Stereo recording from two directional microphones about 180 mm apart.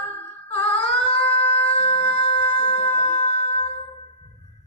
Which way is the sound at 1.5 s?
35° left (ahead or behind).